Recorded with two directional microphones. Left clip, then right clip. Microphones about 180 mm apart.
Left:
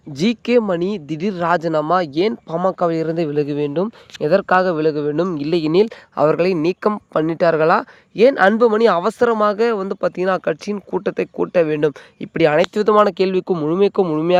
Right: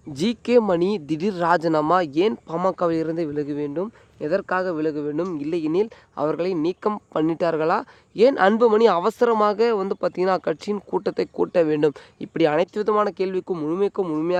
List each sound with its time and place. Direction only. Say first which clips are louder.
0.2 s speech: left 2 dB; 20° left (ahead or behind)
0.6 s speech: left 1 dB; 10° left (ahead or behind); by 6.9 s 35° left (ahead or behind)
6.9 s speech: left 4 dB; 20° left (ahead or behind)
12.7 s speech: left 7 dB; 35° left (ahead or behind)